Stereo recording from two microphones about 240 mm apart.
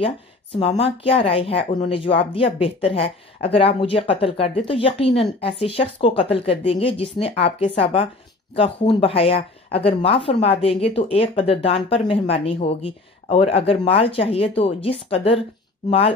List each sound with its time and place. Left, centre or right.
0.6 s a woman's voice: left